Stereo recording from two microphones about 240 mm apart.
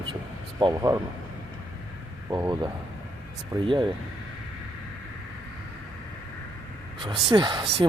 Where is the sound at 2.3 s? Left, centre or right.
Centre.